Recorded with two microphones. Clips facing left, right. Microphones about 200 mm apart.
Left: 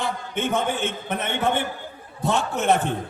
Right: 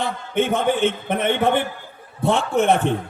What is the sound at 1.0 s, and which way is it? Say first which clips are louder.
A man's voice: right 5 dB; 55° right (ahead or behind).